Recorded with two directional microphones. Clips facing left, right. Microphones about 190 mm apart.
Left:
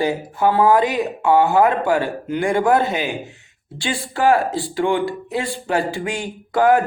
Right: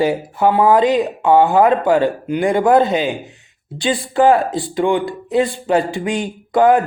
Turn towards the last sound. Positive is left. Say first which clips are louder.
# right 3 dB
turn(degrees=-20)  # may be behind; listen again after turning